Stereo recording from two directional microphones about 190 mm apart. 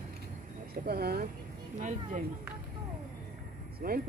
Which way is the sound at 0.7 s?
55° right (ahead or behind).